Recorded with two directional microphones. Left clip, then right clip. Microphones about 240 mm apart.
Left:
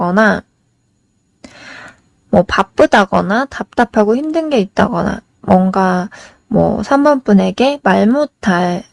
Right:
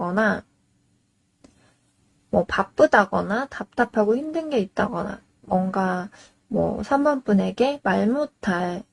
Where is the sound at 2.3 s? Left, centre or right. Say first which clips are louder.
Left 10 dB; left.